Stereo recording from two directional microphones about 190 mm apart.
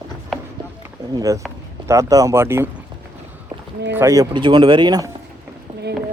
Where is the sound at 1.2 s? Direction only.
15° right (ahead or behind).